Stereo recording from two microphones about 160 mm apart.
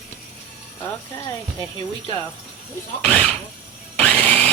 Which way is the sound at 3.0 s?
40° right (ahead or behind).